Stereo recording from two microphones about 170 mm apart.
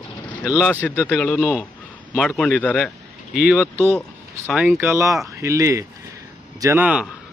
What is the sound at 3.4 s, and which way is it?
Speech, 5° right (ahead or behind).